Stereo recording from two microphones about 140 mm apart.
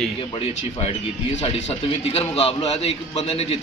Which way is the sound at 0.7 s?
45° left (ahead or behind).